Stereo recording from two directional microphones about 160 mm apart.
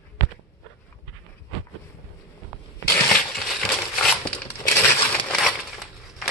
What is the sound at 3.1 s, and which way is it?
Horse, centre (ahead or behind).